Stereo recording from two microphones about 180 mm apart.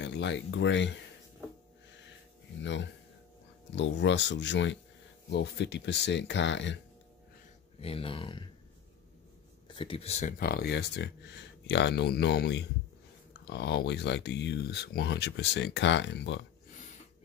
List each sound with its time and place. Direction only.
0.0 s speech: 80° left
2.6 s speech: 90° left
5.3 s speech: 75° left (ahead or behind)
7.8 s speech: 30° left (ahead or behind)
9.7 s speech: 30° left (ahead or behind)
10.4 s speech: 60° left (ahead or behind); by 16.4 s 75° left (ahead or behind)